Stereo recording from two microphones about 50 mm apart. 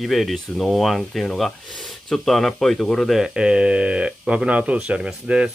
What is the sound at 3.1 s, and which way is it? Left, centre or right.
Speech, centre.